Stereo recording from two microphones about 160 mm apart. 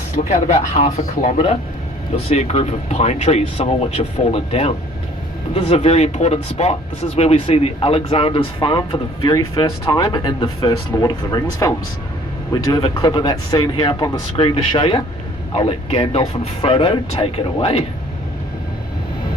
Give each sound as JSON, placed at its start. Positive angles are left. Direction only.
{"t": 0.3, "sound": "speech", "side_deg": 50}